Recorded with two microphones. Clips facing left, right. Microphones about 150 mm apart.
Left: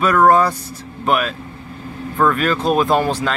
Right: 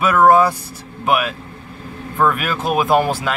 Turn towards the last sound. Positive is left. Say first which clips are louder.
# right 1 dB
turn(degrees=-10)  # may be behind; listen again after turning